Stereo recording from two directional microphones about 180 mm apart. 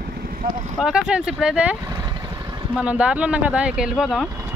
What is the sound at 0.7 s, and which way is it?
Speech, 5° right (ahead or behind).